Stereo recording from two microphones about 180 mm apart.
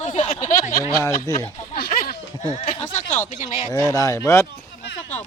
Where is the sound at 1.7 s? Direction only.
60° left (ahead or behind).